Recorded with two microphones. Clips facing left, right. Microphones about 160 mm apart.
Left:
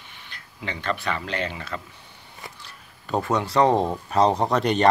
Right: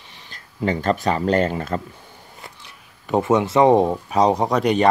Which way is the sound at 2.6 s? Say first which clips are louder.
Right 1 dB; 20° right (ahead or behind).